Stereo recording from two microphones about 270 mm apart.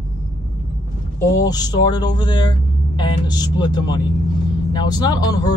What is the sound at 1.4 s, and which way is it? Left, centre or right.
Speech, centre.